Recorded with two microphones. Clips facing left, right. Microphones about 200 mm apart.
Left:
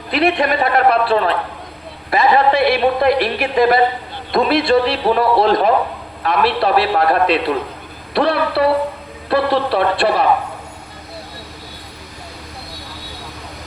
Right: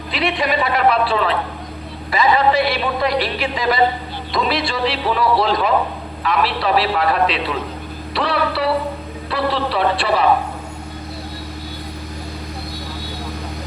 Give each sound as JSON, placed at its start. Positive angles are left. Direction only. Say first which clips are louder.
{"t": 0.1, "sound": "a man's voice", "louder": "left 5 dB", "side_deg": 55}
{"t": 8.1, "sound": "a sound", "louder": "left 4 dB", "side_deg": 55}
{"t": 9.3, "sound": "speech", "louder": "left 5 dB", "side_deg": 55}